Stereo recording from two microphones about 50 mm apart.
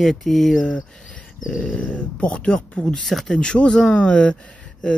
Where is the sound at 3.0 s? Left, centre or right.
Centre.